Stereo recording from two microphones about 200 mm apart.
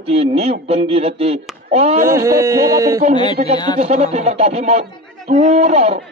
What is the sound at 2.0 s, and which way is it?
Speech, 15° right (ahead or behind).